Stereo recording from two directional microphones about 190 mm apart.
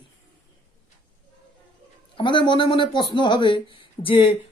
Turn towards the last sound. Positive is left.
turn(degrees=30)  # may be behind; listen again after turning